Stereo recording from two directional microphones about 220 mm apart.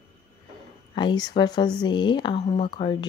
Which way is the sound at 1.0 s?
20° left (ahead or behind).